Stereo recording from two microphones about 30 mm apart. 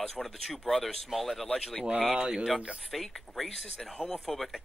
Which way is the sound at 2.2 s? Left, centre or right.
Right.